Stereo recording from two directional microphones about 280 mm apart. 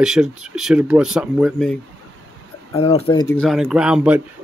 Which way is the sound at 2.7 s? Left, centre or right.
Left.